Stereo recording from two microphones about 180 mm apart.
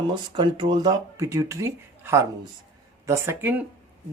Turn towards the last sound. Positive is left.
turn(degrees=-10)  # may be behind; listen again after turning